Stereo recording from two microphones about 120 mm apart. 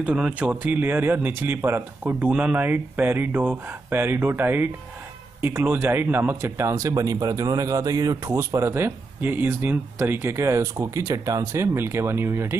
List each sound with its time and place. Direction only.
0.0 s a man's voice: 10° right (ahead or behind)